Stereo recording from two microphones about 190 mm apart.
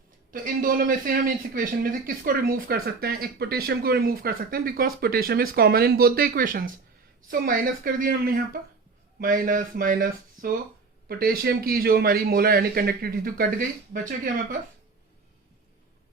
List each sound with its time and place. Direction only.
0.3 s speech: 45° right (ahead or behind)